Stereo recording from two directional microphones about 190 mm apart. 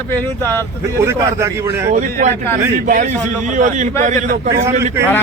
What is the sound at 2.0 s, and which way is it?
A man's voice, 40° right (ahead or behind).